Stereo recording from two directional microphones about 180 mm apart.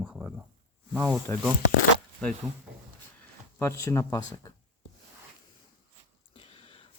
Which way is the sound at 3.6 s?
15° left (ahead or behind).